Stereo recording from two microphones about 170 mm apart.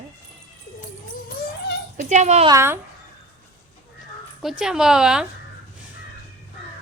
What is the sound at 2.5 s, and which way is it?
Speech, 15° right (ahead or behind).